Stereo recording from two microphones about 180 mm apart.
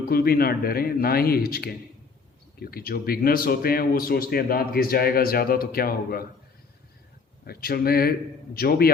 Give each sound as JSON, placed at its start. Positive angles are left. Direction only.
{"t": 0.0, "sound": "a man's voice", "side_deg": 55}
{"t": 7.4, "sound": "a man's voice", "side_deg": 55}